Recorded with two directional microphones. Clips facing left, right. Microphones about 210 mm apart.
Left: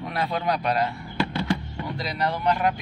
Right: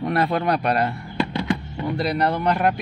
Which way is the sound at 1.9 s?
60° right (ahead or behind).